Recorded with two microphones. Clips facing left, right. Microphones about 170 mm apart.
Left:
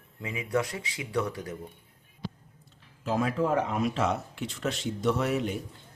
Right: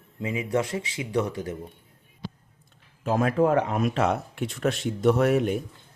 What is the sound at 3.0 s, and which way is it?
Speech, 55° right (ahead or behind).